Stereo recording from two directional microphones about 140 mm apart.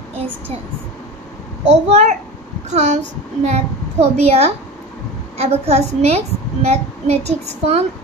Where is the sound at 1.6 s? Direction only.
55° right (ahead or behind).